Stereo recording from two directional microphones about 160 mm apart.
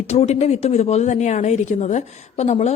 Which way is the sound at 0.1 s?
45° left (ahead or behind).